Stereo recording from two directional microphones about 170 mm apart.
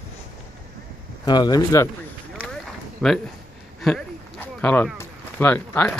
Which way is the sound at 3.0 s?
5° left (ahead or behind).